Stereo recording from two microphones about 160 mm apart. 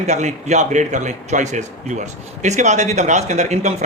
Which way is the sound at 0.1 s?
45° right (ahead or behind).